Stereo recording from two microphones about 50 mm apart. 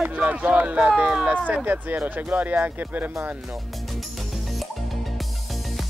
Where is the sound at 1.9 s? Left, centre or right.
Right.